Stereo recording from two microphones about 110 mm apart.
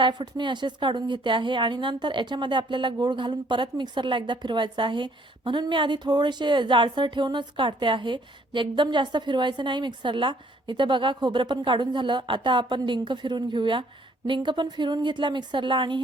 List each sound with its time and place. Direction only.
0.0 s speech: 45° right (ahead or behind)